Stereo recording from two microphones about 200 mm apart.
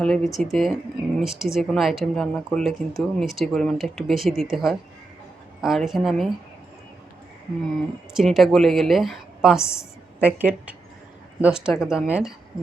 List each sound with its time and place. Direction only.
0.0 s a woman's voice: 5° left (ahead or behind)
8.1 s a woman's voice: centre (ahead or behind)